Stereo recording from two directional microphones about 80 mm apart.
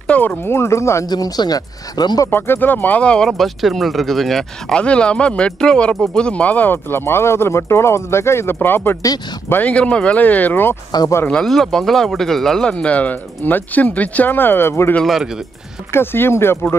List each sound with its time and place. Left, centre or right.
0.0 s speech: centre; by 1.0 s left
1.0 s speech: left
2.3 s speech: left
3.3 s speech: centre; by 10.8 s left
11.2 s speech: centre; by 16.5 s left